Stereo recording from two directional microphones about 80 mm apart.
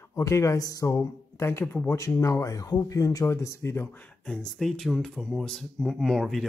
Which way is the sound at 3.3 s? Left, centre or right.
Left.